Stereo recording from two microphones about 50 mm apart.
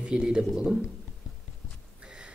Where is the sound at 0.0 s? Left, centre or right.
Centre.